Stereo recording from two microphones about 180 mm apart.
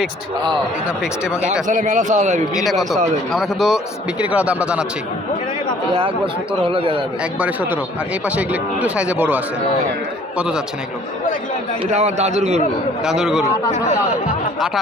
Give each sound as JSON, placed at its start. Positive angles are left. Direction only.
{"t": 1.4, "sound": "a man's voice", "side_deg": -5}
{"t": 1.6, "sound": "a man's voice", "side_deg": -45}
{"t": 2.6, "sound": "a man's voice", "side_deg": 0}
{"t": 6.5, "sound": "speech", "side_deg": -30}
{"t": 7.3, "sound": "a man's voice", "side_deg": -10}
{"t": 11.9, "sound": "a man's voice", "side_deg": -40}
{"t": 13.1, "sound": "speech", "side_deg": -5}